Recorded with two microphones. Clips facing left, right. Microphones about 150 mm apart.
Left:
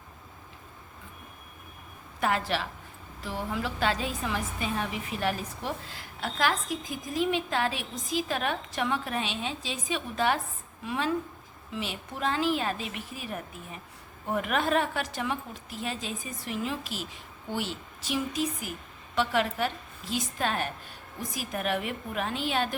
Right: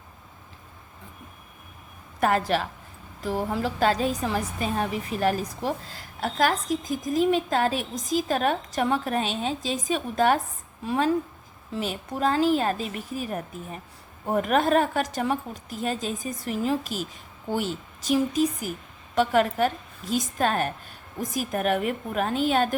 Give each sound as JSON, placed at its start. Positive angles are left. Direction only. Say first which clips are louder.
{"t": 2.2, "sound": "a woman's voice", "louder": "right 5 dB", "side_deg": -45}